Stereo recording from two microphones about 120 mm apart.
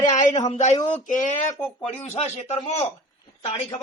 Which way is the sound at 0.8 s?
90° left.